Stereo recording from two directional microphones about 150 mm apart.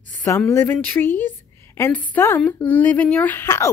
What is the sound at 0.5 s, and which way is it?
A woman's voice, 15° left (ahead or behind).